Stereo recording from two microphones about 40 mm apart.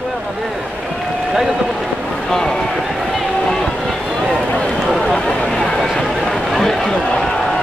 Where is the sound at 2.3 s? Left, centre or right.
Centre.